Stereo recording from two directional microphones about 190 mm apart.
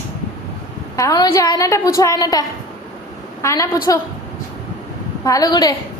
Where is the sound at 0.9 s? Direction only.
20° left (ahead or behind).